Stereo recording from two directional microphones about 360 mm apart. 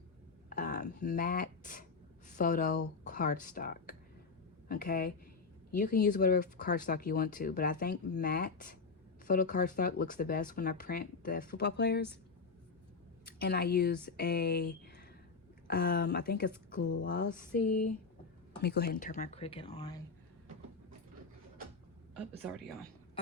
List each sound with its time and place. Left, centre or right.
0.5 s speech: left
13.2 s speech: left